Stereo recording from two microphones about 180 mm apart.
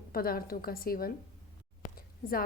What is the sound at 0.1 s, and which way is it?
A woman's voice, 55° left (ahead or behind).